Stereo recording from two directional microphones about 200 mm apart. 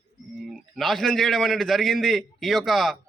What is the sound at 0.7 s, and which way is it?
A man's voice, centre (ahead or behind).